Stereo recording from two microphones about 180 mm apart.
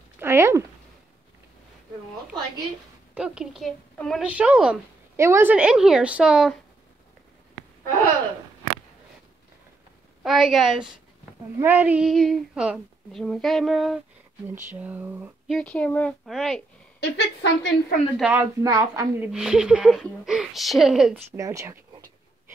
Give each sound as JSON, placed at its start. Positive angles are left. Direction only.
{"t": 0.2, "sound": "a sound", "side_deg": -15}
{"t": 3.2, "sound": "a woman's voice", "side_deg": -5}
{"t": 10.2, "sound": "a woman's voice", "side_deg": 0}
{"t": 14.7, "sound": "speech", "side_deg": -10}
{"t": 15.4, "sound": "a woman's voice", "side_deg": 5}
{"t": 17.0, "sound": "a woman's voice", "side_deg": 75}
{"t": 18.1, "sound": "speech", "side_deg": -10}
{"t": 19.3, "sound": "a woman's voice", "side_deg": -5}
{"t": 21.3, "sound": "speech", "side_deg": -15}